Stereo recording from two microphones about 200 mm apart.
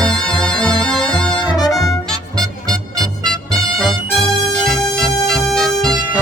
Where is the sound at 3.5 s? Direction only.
Centre (ahead or behind).